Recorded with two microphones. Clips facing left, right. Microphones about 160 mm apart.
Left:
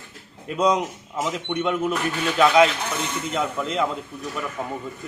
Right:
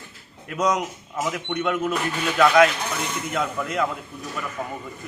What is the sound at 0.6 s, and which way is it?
Speech, 30° left (ahead or behind).